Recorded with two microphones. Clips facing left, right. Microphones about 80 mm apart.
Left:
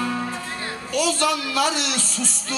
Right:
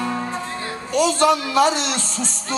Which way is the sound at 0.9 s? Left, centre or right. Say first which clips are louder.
Right 5 dB; right.